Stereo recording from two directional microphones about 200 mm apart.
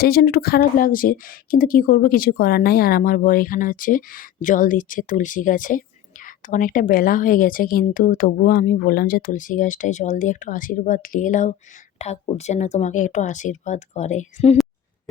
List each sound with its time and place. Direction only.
0.0 s speech: 50° left (ahead or behind); by 14.6 s 35° left (ahead or behind)